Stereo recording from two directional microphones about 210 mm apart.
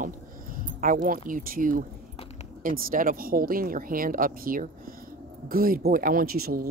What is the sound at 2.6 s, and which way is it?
A woman's voice, 40° right (ahead or behind).